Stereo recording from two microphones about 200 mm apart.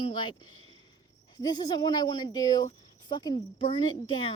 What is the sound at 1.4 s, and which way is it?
Speech, 20° left (ahead or behind).